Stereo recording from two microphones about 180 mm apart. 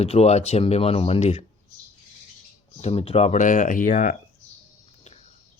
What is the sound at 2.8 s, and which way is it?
Speech, 35° left (ahead or behind).